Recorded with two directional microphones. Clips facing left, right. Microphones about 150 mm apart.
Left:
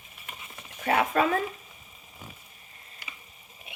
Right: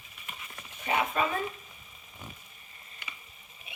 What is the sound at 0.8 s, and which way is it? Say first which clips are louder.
Speech: left 5 dB; 70° left (ahead or behind).